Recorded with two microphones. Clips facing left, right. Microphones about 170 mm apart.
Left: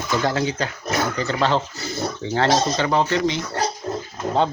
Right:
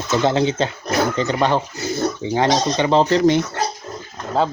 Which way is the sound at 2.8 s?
30° right (ahead or behind).